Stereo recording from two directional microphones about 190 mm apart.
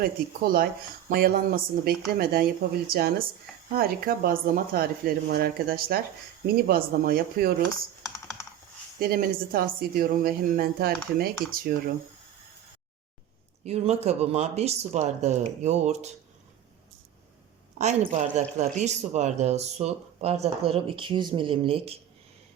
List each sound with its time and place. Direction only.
0.0 s a woman's voice: 50° right (ahead or behind)
9.0 s a woman's voice: 50° right (ahead or behind)
13.7 s speech: 35° right (ahead or behind)
17.7 s speech: 35° right (ahead or behind)